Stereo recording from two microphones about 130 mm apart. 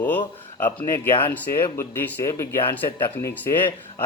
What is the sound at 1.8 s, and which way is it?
Speech, 20° left (ahead or behind).